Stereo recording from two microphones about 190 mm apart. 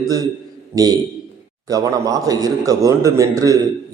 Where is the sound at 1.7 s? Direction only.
20° right (ahead or behind).